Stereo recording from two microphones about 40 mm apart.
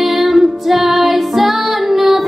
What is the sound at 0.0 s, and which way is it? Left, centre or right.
Music, centre.